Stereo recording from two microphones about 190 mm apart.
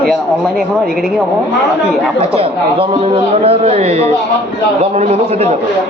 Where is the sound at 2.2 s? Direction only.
30° right (ahead or behind).